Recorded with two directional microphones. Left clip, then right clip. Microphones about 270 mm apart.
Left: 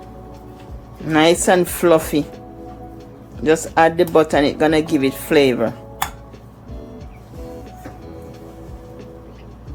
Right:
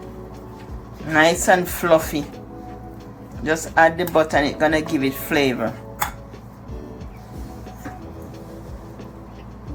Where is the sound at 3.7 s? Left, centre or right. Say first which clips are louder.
Left 1 dB; left.